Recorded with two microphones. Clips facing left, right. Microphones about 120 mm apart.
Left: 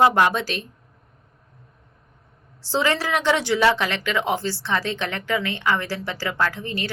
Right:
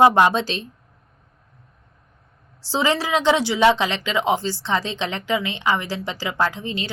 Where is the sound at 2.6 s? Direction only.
15° right (ahead or behind).